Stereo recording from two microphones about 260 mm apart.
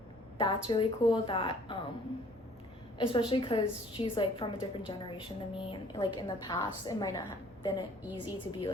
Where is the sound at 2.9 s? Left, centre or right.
Centre.